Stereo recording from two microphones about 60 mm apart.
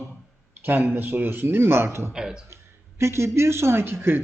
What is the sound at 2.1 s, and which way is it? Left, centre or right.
Speech, centre.